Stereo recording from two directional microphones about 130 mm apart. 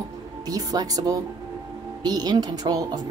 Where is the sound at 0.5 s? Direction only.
30° right (ahead or behind).